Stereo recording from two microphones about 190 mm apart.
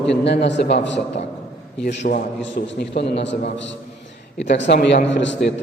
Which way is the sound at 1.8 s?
50° left (ahead or behind).